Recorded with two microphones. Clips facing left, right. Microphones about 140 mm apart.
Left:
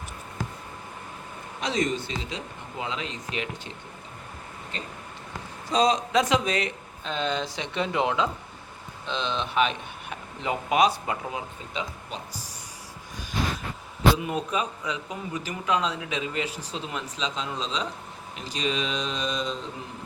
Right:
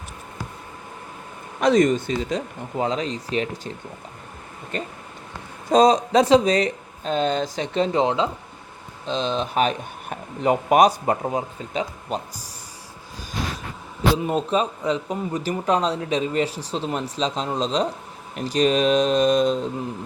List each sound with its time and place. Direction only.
1.6 s speech: 50° right (ahead or behind)
4.7 s speech: 50° right (ahead or behind); by 8.3 s 30° right (ahead or behind)
9.0 s speech: 40° right (ahead or behind)
14.2 s speech: 30° right (ahead or behind); by 19.5 s 50° right (ahead or behind)